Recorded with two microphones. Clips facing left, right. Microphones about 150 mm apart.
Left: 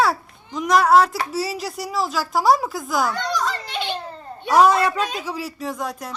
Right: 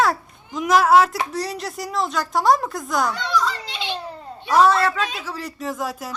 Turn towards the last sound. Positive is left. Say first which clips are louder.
# right 1 dB
turn(degrees=0)  # may be behind; listen again after turning